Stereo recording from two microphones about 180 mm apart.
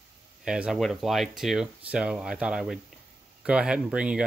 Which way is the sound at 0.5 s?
5° right (ahead or behind).